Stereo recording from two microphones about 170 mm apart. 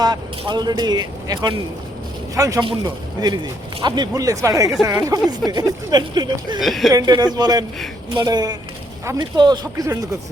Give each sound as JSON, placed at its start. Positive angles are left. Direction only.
{"t": 0.0, "sound": "speech", "side_deg": -25}
{"t": 6.6, "sound": "speech", "side_deg": 0}
{"t": 6.9, "sound": "speech", "side_deg": -25}